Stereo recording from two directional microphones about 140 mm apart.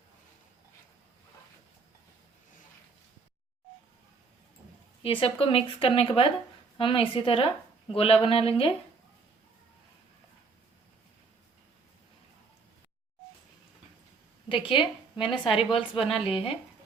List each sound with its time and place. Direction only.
5.0 s a woman's voice: 40° left (ahead or behind)
14.5 s a woman's voice: 35° left (ahead or behind)